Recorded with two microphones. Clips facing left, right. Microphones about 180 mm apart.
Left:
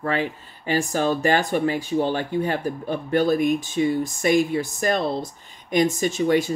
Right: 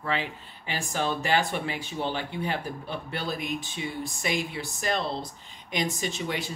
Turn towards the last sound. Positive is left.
turn(degrees=45)  # may be behind; listen again after turning